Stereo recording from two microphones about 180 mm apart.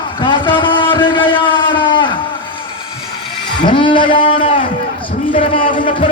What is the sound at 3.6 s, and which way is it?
Speech, 30° left (ahead or behind).